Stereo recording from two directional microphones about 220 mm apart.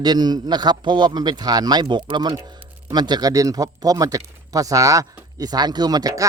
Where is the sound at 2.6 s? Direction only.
10° right (ahead or behind).